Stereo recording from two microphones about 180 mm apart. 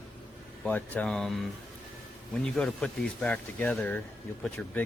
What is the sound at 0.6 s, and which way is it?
Speech, 5° left (ahead or behind).